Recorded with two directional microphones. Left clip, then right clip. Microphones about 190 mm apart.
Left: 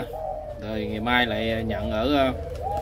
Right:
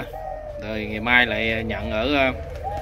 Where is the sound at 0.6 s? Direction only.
15° left (ahead or behind).